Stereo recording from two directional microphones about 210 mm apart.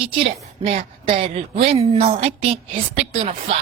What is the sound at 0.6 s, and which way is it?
Speech, 40° right (ahead or behind).